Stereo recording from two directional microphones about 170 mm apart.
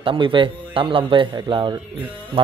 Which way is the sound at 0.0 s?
30° right (ahead or behind).